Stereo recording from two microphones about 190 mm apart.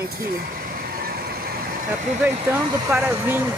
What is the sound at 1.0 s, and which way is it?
Vehicle, 55° right (ahead or behind).